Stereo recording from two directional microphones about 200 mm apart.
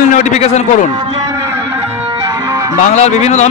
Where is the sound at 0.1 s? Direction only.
35° left (ahead or behind).